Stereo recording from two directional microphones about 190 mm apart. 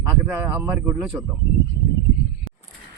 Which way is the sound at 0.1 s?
10° right (ahead or behind).